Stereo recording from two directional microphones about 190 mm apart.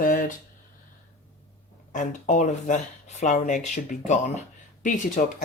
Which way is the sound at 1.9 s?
40° left (ahead or behind).